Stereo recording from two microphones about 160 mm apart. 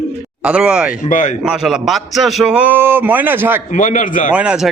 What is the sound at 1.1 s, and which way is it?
Speech, 50° left (ahead or behind).